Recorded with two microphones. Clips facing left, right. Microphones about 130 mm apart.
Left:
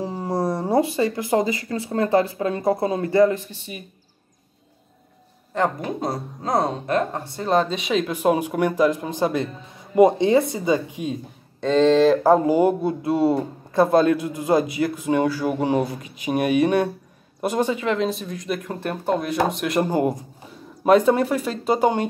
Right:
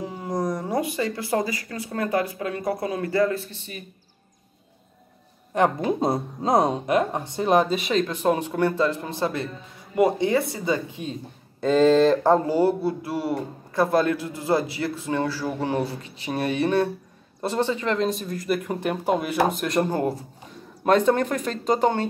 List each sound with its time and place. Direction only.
0.0 s speech: 30° left (ahead or behind); by 3.8 s 10° left (ahead or behind)
5.8 s speech: 25° right (ahead or behind)
7.7 s speech: centre (ahead or behind)
11.6 s speech: 5° right (ahead or behind)